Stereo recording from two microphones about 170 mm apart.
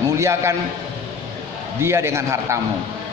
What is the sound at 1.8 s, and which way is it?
Speech, 15° right (ahead or behind).